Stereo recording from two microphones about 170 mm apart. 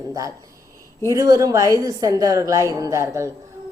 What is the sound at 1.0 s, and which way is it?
A woman's voice, 20° right (ahead or behind).